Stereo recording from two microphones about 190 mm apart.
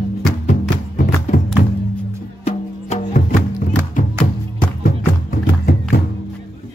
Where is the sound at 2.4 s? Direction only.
40° left (ahead or behind).